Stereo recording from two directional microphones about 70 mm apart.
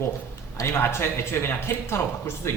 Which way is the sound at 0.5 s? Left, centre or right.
Left.